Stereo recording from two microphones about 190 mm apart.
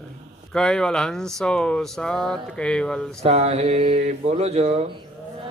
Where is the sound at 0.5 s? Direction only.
5° left (ahead or behind).